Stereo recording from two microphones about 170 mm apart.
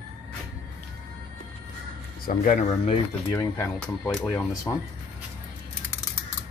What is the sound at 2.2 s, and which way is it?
Speech, 55° left (ahead or behind).